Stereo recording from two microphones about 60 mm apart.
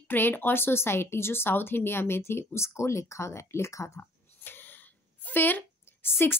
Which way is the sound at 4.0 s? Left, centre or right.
Left.